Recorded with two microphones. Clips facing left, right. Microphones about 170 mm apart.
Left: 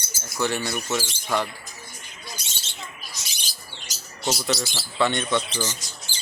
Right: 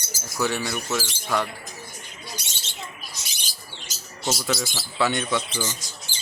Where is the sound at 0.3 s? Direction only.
Centre (ahead or behind).